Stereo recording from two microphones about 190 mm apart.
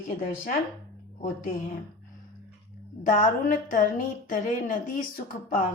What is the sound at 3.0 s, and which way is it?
A woman's voice, 40° left (ahead or behind).